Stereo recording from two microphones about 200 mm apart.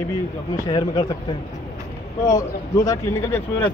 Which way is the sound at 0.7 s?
20° left (ahead or behind).